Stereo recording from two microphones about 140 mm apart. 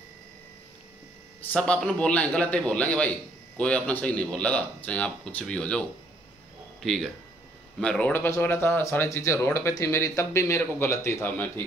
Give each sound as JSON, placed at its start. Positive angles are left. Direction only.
{"t": 1.5, "sound": "speech", "side_deg": 5}